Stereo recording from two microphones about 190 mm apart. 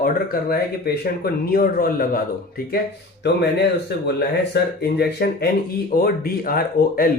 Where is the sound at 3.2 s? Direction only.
60° left (ahead or behind).